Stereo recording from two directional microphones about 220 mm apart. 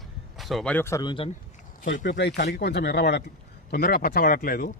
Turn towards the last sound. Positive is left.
turn(degrees=40)  # may be behind; listen again after turning